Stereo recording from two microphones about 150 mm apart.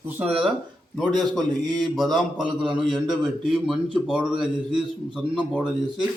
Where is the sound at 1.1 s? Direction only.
30° right (ahead or behind).